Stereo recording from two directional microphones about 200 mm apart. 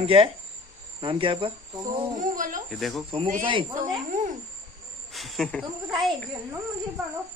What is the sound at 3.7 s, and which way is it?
Snake, 40° right (ahead or behind).